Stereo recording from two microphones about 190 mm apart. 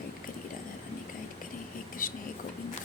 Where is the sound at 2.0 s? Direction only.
50° left (ahead or behind).